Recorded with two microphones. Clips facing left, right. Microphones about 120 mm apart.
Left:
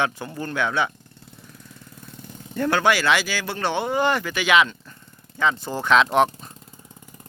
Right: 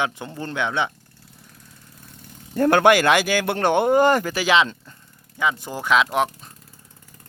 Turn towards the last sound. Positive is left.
turn(degrees=0)  # may be behind; listen again after turning